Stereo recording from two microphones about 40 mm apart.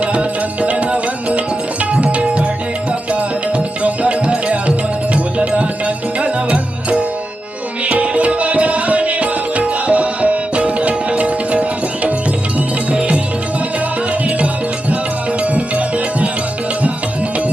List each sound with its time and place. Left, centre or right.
0.0 s music: right
1.8 s tabla: right
3.1 s music: right